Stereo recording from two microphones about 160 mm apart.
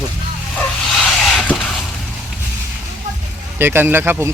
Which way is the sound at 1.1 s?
5° left (ahead or behind).